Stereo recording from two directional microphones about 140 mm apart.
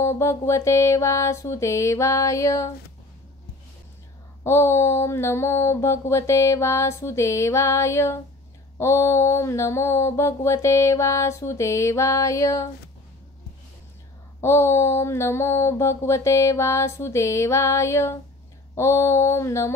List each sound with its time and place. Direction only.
0.0 s mantra: 20° left (ahead or behind)
4.4 s mantra: 20° left (ahead or behind)
14.4 s mantra: 20° left (ahead or behind)